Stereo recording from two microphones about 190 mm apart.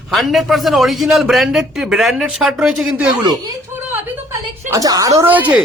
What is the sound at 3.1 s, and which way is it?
Chuckle, 20° right (ahead or behind).